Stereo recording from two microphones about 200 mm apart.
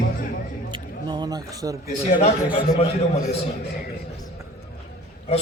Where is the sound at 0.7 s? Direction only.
20° right (ahead or behind).